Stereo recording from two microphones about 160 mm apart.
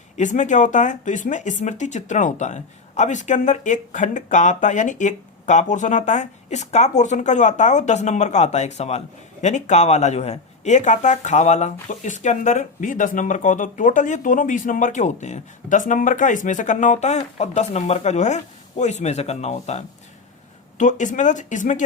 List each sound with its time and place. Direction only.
0.2 s speech: 50° left (ahead or behind)